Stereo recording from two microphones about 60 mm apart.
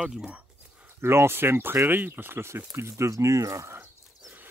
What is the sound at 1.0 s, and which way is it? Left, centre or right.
Speech, right.